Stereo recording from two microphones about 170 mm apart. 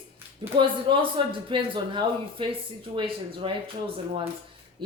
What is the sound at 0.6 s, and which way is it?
A man's voice, 30° right (ahead or behind).